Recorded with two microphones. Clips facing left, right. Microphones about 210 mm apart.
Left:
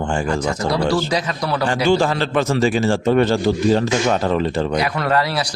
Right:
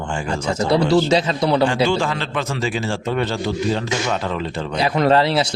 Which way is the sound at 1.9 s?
40° left (ahead or behind).